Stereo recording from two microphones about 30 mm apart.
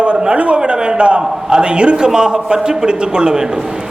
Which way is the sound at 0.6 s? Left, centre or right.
Right.